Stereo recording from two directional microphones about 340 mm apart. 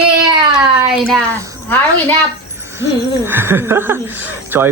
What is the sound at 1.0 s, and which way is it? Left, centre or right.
Speech, centre.